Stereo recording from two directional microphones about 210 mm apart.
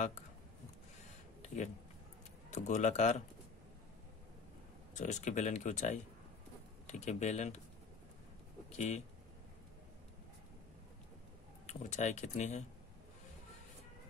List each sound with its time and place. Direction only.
2.5 s speech: 35° left (ahead or behind)
4.9 s speech: 35° left (ahead or behind)
8.7 s speech: 30° left (ahead or behind)
11.6 s speech: 30° left (ahead or behind)